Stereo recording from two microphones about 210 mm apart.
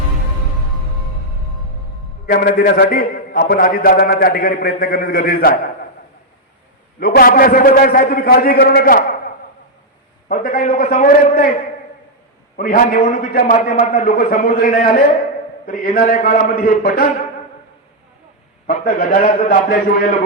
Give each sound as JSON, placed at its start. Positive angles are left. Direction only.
{"t": 2.2, "sound": "a man's voice", "side_deg": 45}
{"t": 7.0, "sound": "a man's voice", "side_deg": 45}
{"t": 10.2, "sound": "a man's voice", "side_deg": 40}
{"t": 12.5, "sound": "a man's voice", "side_deg": 40}
{"t": 18.7, "sound": "a man's voice", "side_deg": 40}